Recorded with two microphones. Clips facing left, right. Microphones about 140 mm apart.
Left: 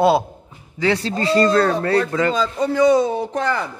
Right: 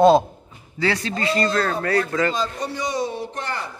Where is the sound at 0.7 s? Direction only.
20° left (ahead or behind).